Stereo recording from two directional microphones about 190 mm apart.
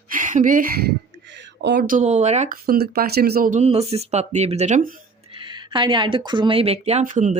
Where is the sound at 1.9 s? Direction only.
40° right (ahead or behind).